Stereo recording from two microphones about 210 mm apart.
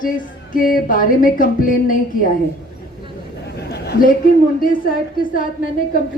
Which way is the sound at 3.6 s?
50° left (ahead or behind).